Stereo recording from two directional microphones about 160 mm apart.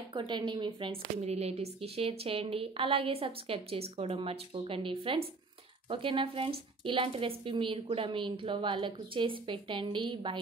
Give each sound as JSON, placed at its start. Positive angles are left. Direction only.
{"t": 0.1, "sound": "speech", "side_deg": -30}